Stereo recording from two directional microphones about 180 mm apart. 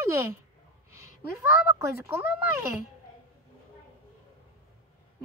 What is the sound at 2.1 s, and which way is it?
Speech, 15° right (ahead or behind).